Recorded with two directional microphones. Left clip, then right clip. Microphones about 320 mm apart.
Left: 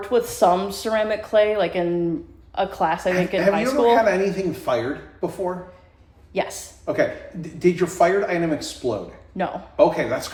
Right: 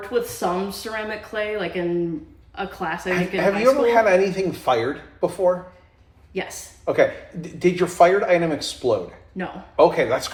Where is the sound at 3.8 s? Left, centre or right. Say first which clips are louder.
Right 1 dB; centre.